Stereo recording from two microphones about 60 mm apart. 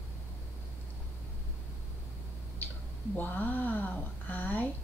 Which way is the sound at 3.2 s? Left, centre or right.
Left.